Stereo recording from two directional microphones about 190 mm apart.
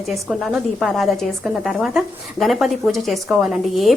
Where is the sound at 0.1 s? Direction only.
Centre (ahead or behind).